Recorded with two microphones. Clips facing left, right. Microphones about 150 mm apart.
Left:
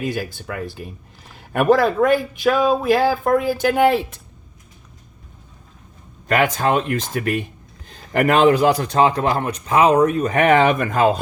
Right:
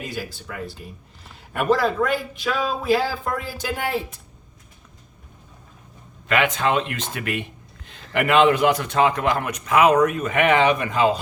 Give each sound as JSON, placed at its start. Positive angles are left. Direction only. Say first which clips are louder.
{"t": 0.1, "sound": "speech", "louder": "left 6 dB", "side_deg": 55}
{"t": 6.2, "sound": "a man's voice", "louder": "left 3 dB", "side_deg": 40}